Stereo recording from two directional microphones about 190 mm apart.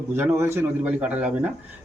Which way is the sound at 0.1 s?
10° right (ahead or behind).